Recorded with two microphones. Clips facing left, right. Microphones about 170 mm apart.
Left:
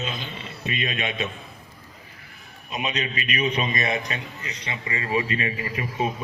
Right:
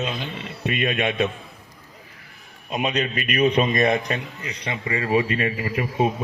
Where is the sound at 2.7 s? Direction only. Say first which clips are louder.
Right 5 dB; 55° right (ahead or behind).